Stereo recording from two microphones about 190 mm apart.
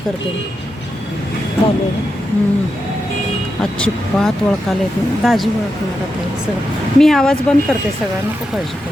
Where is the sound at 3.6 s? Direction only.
5° left (ahead or behind).